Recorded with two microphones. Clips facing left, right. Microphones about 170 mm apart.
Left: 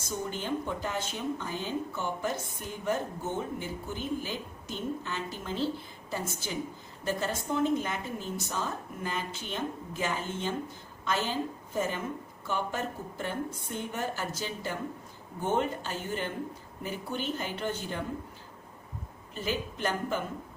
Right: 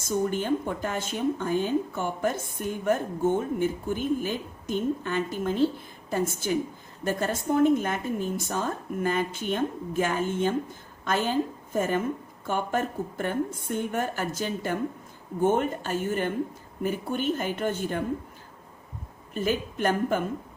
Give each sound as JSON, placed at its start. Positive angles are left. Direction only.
{"t": 0.1, "sound": "a woman's voice", "side_deg": -50}
{"t": 19.3, "sound": "speech", "side_deg": -50}